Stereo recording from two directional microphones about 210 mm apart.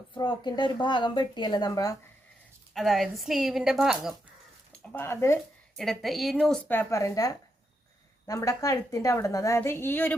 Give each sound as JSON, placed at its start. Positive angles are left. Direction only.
{"t": 0.1, "sound": "speech", "side_deg": 20}
{"t": 2.7, "sound": "a woman's voice", "side_deg": 0}
{"t": 4.9, "sound": "a woman's voice", "side_deg": 10}
{"t": 5.7, "sound": "a woman's voice", "side_deg": 0}